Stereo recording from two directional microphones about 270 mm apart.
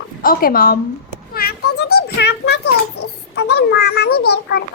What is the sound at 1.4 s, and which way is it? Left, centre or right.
Children playing, left.